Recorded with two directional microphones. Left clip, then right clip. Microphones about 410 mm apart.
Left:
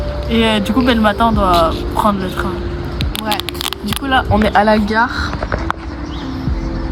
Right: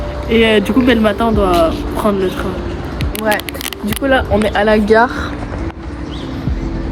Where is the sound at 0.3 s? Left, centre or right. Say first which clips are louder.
Right 4 dB; centre.